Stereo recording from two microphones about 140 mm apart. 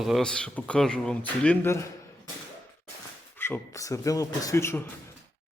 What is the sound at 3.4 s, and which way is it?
Speech, 15° left (ahead or behind).